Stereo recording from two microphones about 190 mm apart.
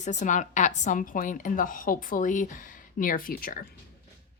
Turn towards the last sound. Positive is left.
turn(degrees=50)  # may be behind; listen again after turning